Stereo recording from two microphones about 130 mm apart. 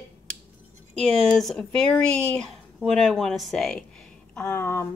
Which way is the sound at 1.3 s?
5° left (ahead or behind).